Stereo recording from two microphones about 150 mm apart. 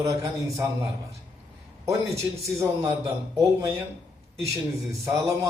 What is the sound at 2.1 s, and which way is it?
A man's voice, 20° right (ahead or behind).